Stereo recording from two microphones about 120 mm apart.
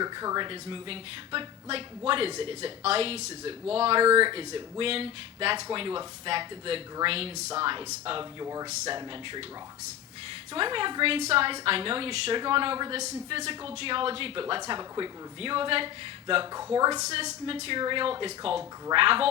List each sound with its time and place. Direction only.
0.0 s speech: 35° right (ahead or behind); by 7.5 s 60° right (ahead or behind)
7.5 s speech: 45° right (ahead or behind)
8.4 s speech: 30° right (ahead or behind)
10.5 s speech: 45° right (ahead or behind)
17.4 s speech: 45° right (ahead or behind)